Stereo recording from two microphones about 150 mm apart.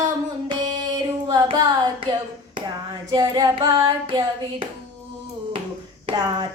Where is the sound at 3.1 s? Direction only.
25° right (ahead or behind).